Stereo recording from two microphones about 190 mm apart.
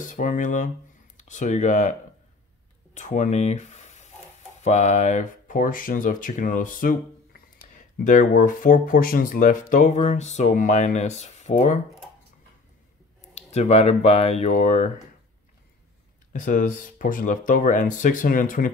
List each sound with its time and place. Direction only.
0.0 s speech: 45° left (ahead or behind)
2.9 s a sound: 35° left (ahead or behind)
4.6 s speech: 35° left (ahead or behind)
13.3 s speech: 35° left (ahead or behind)
16.3 s speech: 45° left (ahead or behind)